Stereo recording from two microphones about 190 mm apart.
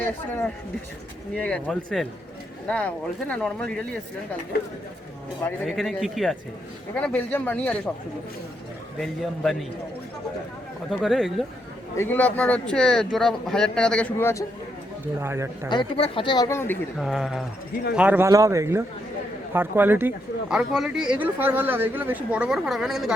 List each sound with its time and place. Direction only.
1.4 s speech: 5° left (ahead or behind)
5.6 s speech: centre (ahead or behind)
9.0 s speech: centre (ahead or behind)
10.9 s speech: centre (ahead or behind)
15.2 s speech: 15° right (ahead or behind)
15.7 s speech: 25° left (ahead or behind)
17.0 s speech: centre (ahead or behind)